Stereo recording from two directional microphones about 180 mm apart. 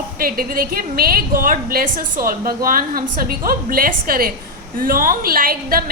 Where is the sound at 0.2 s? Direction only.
55° right (ahead or behind).